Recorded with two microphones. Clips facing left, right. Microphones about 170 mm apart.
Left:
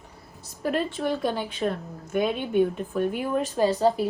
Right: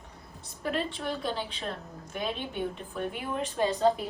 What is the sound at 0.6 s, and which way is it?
Speech, 45° left (ahead or behind).